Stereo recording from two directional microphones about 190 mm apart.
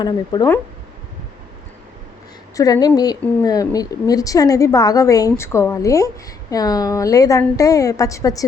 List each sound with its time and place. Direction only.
0.0 s a woman's voice: 20° left (ahead or behind)
2.6 s a woman's voice: 20° left (ahead or behind)